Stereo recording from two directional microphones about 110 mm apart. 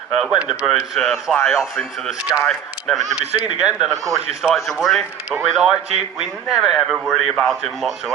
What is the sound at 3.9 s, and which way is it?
Speech, 30° right (ahead or behind).